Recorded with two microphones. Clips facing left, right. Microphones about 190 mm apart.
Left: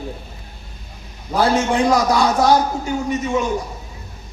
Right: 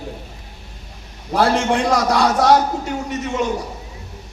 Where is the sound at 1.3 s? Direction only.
75° right (ahead or behind).